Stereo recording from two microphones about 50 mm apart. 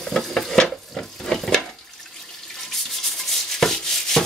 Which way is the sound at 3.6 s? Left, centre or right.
Centre.